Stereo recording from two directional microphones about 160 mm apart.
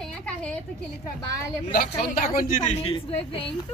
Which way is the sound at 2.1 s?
60° left (ahead or behind).